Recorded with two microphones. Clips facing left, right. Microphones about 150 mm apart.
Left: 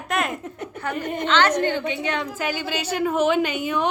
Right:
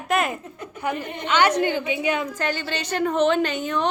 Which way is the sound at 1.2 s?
10° right (ahead or behind).